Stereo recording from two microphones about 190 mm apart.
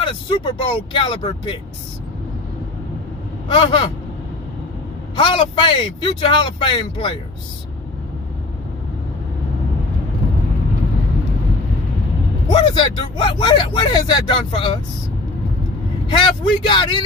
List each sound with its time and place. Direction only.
0.0 s speech: 25° left (ahead or behind)
3.4 s speech: 25° left (ahead or behind)
5.1 s speech: 25° left (ahead or behind)
12.4 s speech: 25° left (ahead or behind)
16.1 s speech: 25° left (ahead or behind)